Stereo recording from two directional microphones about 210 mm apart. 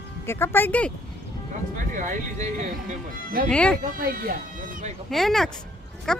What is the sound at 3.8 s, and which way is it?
Speech, 45° right (ahead or behind).